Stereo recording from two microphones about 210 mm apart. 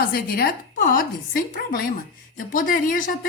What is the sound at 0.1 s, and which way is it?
A woman's voice, 45° left (ahead or behind).